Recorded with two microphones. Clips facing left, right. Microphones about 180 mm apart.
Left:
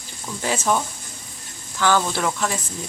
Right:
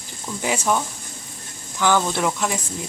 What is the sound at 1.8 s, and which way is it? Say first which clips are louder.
Speech: right 1 dB; 15° right (ahead or behind).